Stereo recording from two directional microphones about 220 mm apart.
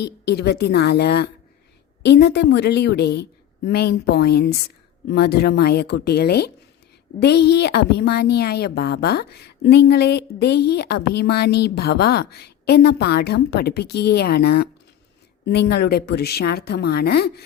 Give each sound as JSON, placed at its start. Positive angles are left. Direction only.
{"t": 0.0, "sound": "speech", "side_deg": 50}